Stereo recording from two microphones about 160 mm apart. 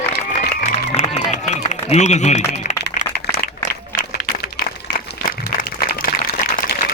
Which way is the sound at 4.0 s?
65° left (ahead or behind).